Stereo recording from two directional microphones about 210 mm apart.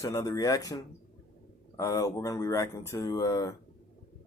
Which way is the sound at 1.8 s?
15° left (ahead or behind).